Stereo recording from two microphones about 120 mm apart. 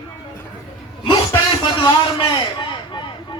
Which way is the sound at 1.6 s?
40° left (ahead or behind).